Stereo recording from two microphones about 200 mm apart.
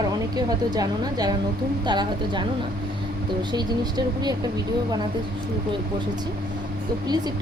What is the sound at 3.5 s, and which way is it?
Speech, 20° right (ahead or behind).